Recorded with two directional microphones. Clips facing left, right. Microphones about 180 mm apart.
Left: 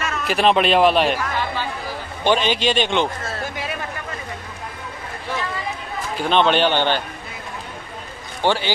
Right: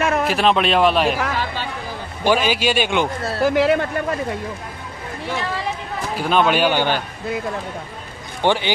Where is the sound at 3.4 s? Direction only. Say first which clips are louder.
Right 17 dB; 70° right (ahead or behind).